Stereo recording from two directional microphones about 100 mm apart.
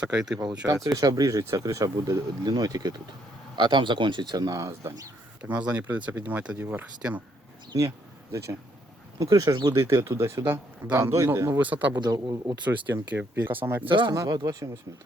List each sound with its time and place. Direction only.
0.0 s speech: 10° right (ahead or behind)
0.9 s speech: 40° right (ahead or behind)
3.5 s speech: 50° right (ahead or behind); by 5.1 s 30° right (ahead or behind)
5.4 s speech: 15° right (ahead or behind)
7.7 s insect: 30° right (ahead or behind)
9.1 s speech: 35° right (ahead or behind)
11.6 s speech: 15° right (ahead or behind)
11.9 s speech: 45° right (ahead or behind)
12.7 s speech: 20° right (ahead or behind)
14.1 s speech: 30° right (ahead or behind)